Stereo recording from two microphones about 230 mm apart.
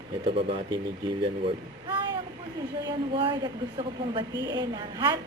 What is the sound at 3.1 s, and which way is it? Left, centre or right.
A woman's voice, right.